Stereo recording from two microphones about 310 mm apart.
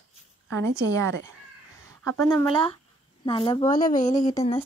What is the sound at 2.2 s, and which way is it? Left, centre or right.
A woman's voice, centre.